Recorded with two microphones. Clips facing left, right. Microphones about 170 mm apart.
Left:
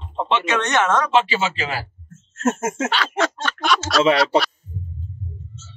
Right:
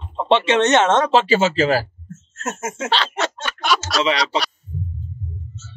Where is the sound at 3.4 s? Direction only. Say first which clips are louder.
Even; centre (ahead or behind).